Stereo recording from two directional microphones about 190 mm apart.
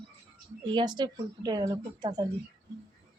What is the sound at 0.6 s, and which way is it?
Speech, 25° right (ahead or behind).